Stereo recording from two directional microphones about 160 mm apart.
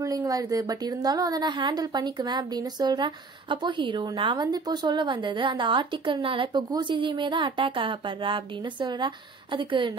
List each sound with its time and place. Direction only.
0.0 s a woman's voice: 20° right (ahead or behind)